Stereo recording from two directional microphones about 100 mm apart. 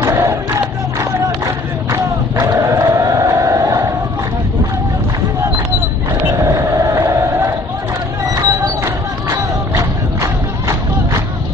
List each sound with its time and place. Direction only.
0.0 s crowd: 30° right (ahead or behind)
2.4 s crowd: 30° right (ahead or behind)
6.4 s vehicle: 35° right (ahead or behind)
8.4 s music: 35° right (ahead or behind)